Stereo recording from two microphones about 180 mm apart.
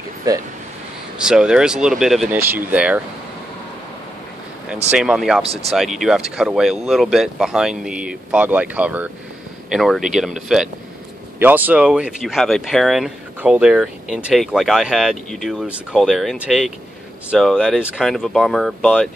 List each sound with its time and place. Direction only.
0.3 s speech: 20° right (ahead or behind)
1.1 s speech: 5° right (ahead or behind)
2.3 s speech: 10° right (ahead or behind)
4.9 s speech: 5° right (ahead or behind)
5.4 s speech: 35° right (ahead or behind)
5.7 s speech: centre (ahead or behind)